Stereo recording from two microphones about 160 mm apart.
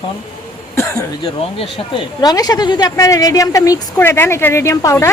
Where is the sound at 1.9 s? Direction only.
25° left (ahead or behind).